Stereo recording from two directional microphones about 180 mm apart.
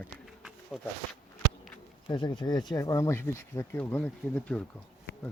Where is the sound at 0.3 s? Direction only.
Centre (ahead or behind).